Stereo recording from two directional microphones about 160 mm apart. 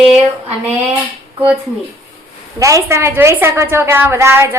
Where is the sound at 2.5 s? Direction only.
20° right (ahead or behind).